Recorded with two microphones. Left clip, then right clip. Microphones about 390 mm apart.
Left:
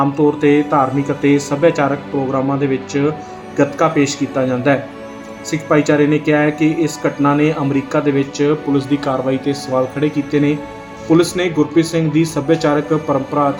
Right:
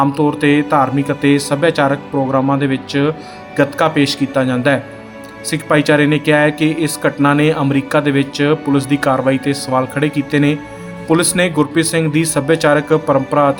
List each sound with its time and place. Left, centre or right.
0.0 s speech: right
9.3 s speech: right